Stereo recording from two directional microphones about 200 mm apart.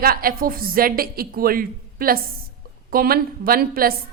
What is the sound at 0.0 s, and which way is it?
A woman's voice, 45° right (ahead or behind).